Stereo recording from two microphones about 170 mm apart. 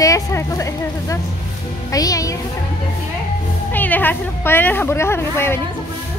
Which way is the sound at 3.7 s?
10° left (ahead or behind).